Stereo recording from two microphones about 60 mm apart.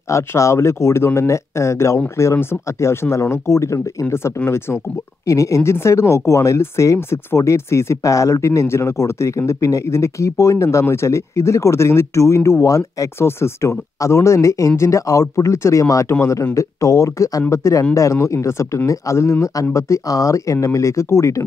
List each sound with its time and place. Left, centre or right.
0.1 s speech: left
5.2 s speech: left
5.6 s speech: left
13.2 s speech: left
16.5 s speech: left